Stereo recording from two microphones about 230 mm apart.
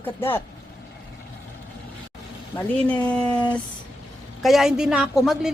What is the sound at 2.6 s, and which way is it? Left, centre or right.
Speech, centre.